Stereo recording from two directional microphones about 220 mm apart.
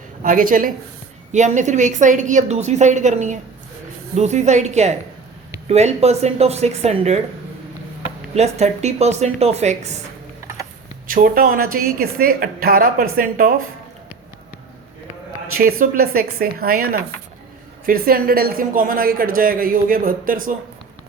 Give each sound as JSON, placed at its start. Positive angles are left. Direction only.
{"t": 0.2, "sound": "a woman's voice", "side_deg": -40}
{"t": 8.4, "sound": "a woman's voice", "side_deg": -30}
{"t": 11.0, "sound": "a woman's voice", "side_deg": -40}
{"t": 15.8, "sound": "a woman's voice", "side_deg": -45}